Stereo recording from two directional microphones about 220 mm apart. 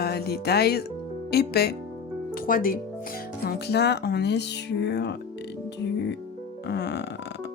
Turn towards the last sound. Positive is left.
turn(degrees=50)  # may be behind; listen again after turning